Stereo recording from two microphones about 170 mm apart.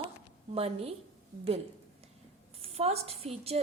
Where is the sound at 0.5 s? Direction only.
35° right (ahead or behind).